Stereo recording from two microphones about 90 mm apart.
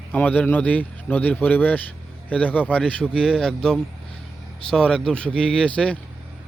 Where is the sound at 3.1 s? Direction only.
5° right (ahead or behind).